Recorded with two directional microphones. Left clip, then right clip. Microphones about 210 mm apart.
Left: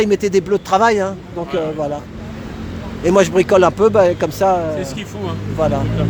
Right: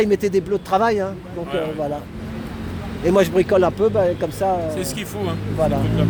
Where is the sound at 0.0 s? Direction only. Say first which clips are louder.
Left 3 dB; 10° left (ahead or behind).